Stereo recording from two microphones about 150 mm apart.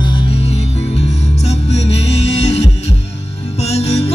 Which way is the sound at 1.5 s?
45° left (ahead or behind).